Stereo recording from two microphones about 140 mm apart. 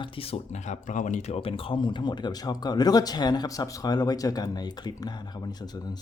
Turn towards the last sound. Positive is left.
turn(degrees=30)  # may be behind; listen again after turning